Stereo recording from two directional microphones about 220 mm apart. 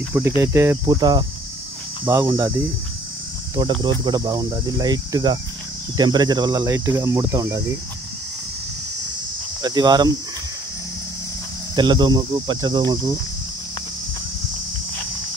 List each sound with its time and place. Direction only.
0.4 s speech: 10° right (ahead or behind)
3.5 s speech: 20° right (ahead or behind)
9.6 s speech: 20° right (ahead or behind)
11.7 s speech: 20° right (ahead or behind)